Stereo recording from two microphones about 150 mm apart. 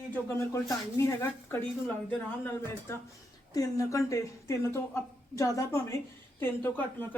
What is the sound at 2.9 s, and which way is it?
A man's voice, 20° left (ahead or behind).